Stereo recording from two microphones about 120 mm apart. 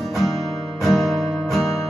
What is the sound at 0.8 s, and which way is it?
Music, centre (ahead or behind).